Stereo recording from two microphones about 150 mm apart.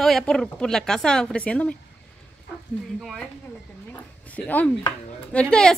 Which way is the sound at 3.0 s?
5° left (ahead or behind).